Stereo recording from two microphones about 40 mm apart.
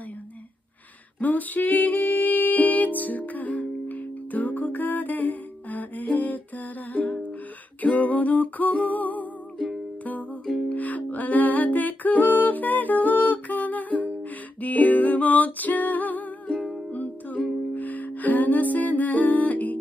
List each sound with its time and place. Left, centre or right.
1.2 s music: left
10.7 s music: left